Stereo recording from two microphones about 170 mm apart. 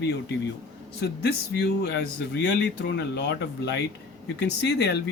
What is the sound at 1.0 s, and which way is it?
Speech, 75° left (ahead or behind).